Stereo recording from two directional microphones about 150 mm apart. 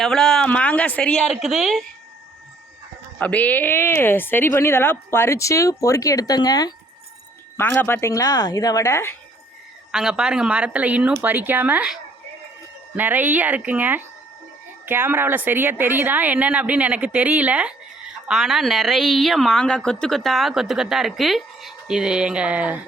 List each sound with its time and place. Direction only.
0.0 s a woman's voice: 5° left (ahead or behind)
3.2 s a woman's voice: 10° left (ahead or behind); by 6.7 s 25° left (ahead or behind)
7.5 s speech: 15° left (ahead or behind)
9.9 s a woman's voice: 5° right (ahead or behind)
13.0 s a woman's voice: 10° right (ahead or behind)